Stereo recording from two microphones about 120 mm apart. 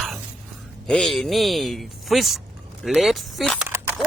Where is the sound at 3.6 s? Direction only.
20° right (ahead or behind).